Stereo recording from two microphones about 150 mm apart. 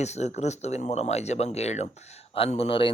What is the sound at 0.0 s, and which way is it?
Speech, 50° left (ahead or behind).